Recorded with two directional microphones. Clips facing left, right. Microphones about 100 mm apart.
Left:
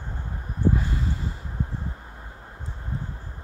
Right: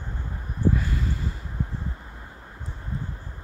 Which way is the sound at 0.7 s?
30° left (ahead or behind).